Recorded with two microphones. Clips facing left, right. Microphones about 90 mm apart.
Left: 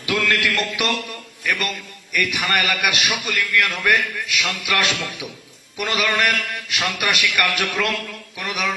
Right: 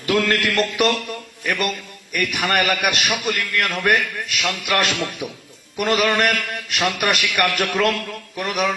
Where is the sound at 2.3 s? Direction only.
Centre (ahead or behind).